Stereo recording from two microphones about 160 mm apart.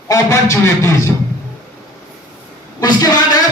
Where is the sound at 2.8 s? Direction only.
25° left (ahead or behind).